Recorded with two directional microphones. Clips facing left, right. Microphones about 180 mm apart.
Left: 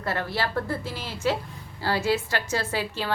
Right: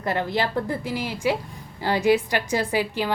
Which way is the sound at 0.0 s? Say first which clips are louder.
Right 4 dB; 20° right (ahead or behind).